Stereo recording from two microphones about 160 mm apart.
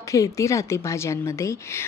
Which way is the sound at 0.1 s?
20° left (ahead or behind).